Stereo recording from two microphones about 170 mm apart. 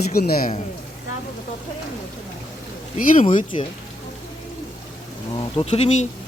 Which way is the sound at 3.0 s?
50° left (ahead or behind).